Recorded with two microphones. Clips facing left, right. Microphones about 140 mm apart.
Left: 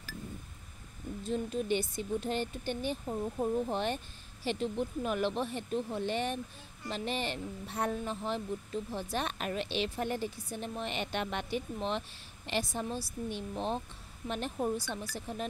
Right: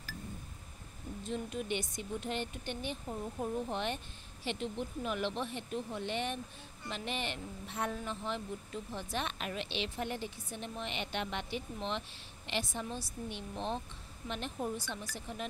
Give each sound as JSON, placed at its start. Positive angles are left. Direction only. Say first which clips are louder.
{"t": 1.3, "sound": "a woman's voice", "louder": "left 5 dB", "side_deg": 35}